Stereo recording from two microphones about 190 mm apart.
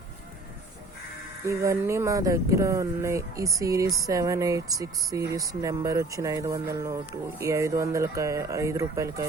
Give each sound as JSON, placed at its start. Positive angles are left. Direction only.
{"t": 1.5, "sound": "speech", "side_deg": -15}